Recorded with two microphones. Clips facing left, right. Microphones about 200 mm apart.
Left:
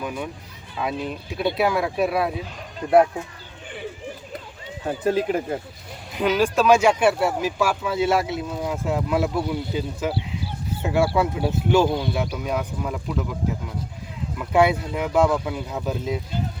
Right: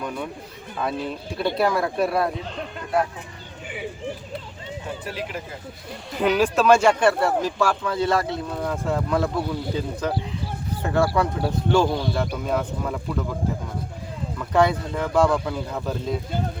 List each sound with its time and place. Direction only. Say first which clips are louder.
0.0 s speech: even; 5° left (ahead or behind)
5.0 s speech: left 10 dB; 45° left (ahead or behind)
6.1 s speech: even; centre (ahead or behind)
14.3 s speech: left 1 dB; 10° left (ahead or behind)